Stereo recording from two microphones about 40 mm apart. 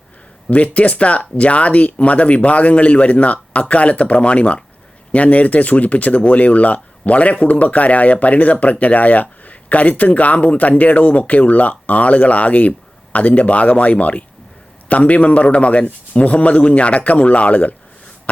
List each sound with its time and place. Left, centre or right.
0.4 s speech: left